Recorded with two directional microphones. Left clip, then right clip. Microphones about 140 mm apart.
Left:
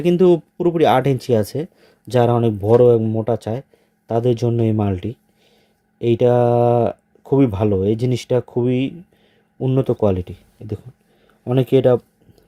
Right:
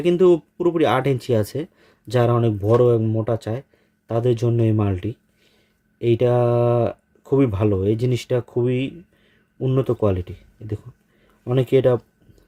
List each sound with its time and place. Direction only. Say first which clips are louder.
0.0 s speech: left 1 dB; 25° left (ahead or behind)